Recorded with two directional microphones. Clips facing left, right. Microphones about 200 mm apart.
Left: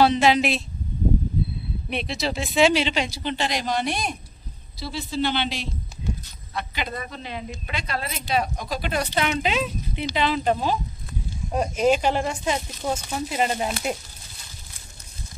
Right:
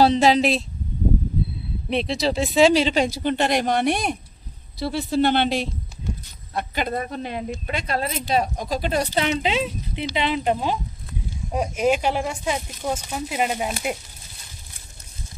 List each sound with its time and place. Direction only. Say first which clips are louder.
0.0 s speech: right 2 dB; 35° right (ahead or behind)
1.9 s speech: right 5 dB; 35° right (ahead or behind); by 13.9 s 10° right (ahead or behind)